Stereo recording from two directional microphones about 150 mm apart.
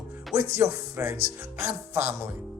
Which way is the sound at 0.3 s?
20° right (ahead or behind).